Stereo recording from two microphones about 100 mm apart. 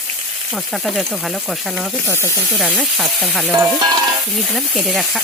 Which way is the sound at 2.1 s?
25° left (ahead or behind).